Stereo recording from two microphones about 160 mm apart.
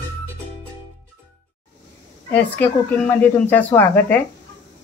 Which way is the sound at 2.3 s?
10° left (ahead or behind).